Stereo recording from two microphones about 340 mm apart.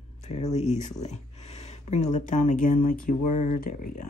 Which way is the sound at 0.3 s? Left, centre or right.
Centre.